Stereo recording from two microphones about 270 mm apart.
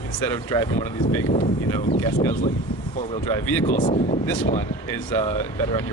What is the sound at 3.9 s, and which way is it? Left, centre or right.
Speech, left.